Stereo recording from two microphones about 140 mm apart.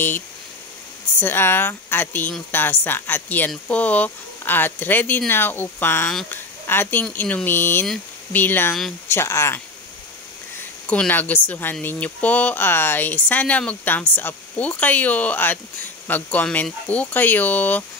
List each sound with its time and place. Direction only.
1.2 s speech: 15° left (ahead or behind)
7.8 s speech: 5° left (ahead or behind)
8.4 s speech: 15° left (ahead or behind)
10.9 s speech: 10° left (ahead or behind)